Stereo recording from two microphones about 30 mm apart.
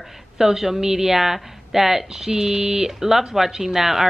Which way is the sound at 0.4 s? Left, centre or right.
Centre.